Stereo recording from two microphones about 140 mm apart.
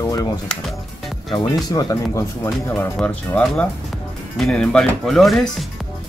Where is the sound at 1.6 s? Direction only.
25° left (ahead or behind).